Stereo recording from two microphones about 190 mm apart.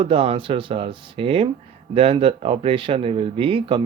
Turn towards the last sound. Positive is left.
turn(degrees=-25)  # may be behind; listen again after turning